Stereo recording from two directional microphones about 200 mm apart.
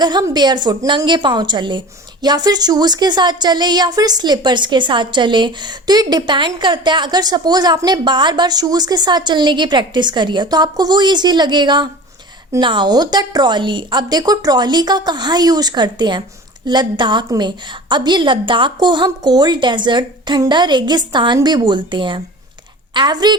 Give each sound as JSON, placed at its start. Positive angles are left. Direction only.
{"t": 0.0, "sound": "a woman's voice", "side_deg": -20}